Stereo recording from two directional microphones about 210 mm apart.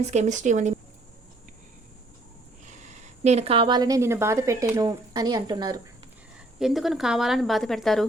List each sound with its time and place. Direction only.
0.0 s speech: 30° right (ahead or behind)
2.6 s speech: 35° right (ahead or behind); by 5.8 s 20° right (ahead or behind)
6.6 s a woman's voice: centre (ahead or behind)